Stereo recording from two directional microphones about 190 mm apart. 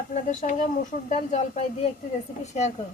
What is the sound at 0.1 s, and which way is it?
Speech, 40° left (ahead or behind).